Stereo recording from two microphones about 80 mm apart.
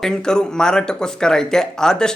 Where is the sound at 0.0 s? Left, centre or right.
Centre.